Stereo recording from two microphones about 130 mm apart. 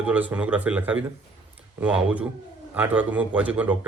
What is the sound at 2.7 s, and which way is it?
Speech, 15° right (ahead or behind).